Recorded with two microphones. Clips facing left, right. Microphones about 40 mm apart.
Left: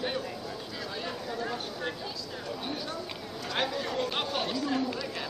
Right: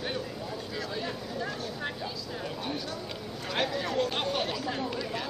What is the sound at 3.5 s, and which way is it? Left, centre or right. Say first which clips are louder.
Speech: right 2 dB; centre.